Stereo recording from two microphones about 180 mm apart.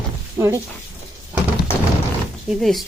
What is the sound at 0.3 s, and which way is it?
Speech, 15° right (ahead or behind).